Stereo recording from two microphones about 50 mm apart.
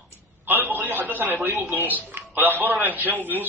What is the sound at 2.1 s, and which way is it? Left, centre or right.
A man's voice, right.